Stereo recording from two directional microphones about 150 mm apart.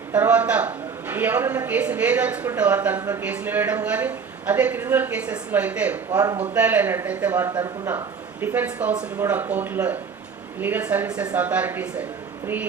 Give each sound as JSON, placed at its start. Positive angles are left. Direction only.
{"t": 0.1, "sound": "a woman's voice", "side_deg": -10}
{"t": 3.0, "sound": "speech", "side_deg": -20}
{"t": 3.2, "sound": "a woman's voice", "side_deg": -10}